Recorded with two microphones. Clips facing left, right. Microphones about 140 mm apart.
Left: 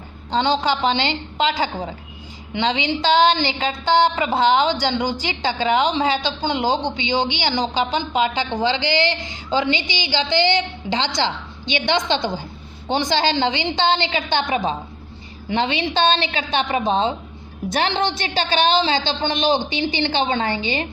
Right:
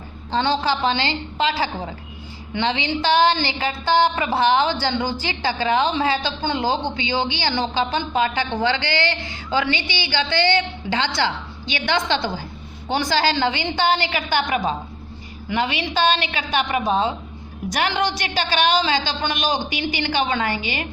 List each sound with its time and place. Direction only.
0.3 s a woman's voice: 20° left (ahead or behind)